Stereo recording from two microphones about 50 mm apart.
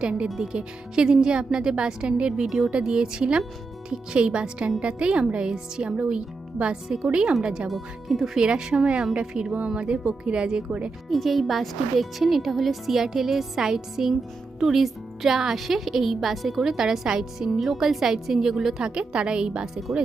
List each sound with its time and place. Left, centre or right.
0.0 s speech: right
7.7 s speech: centre
11.1 s speech: centre
18.8 s speech: centre